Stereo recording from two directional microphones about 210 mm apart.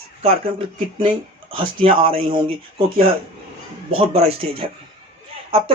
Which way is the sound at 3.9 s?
30° right (ahead or behind).